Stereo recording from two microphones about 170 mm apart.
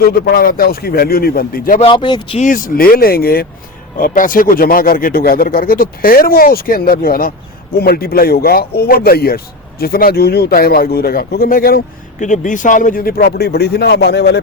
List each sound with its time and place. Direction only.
0.0 s speech: 60° left (ahead or behind)
1.8 s speech: 30° left (ahead or behind)
2.4 s speech: 50° left (ahead or behind)
12.2 s speech: 45° left (ahead or behind); by 14.4 s 75° left (ahead or behind)